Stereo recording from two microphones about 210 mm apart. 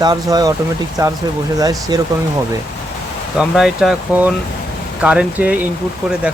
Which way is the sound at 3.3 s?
Centre (ahead or behind).